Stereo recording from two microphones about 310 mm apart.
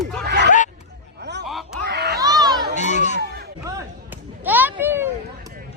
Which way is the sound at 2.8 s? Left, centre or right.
Left.